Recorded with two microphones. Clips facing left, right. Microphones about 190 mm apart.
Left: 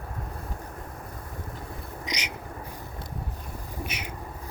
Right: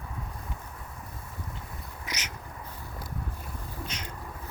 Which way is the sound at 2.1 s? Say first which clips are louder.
Left 4 dB; 15° left (ahead or behind).